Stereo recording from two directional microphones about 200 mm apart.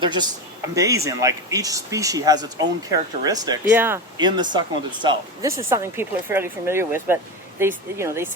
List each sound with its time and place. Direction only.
0.0 s speech: 20° right (ahead or behind)
4.2 s speech: 20° right (ahead or behind)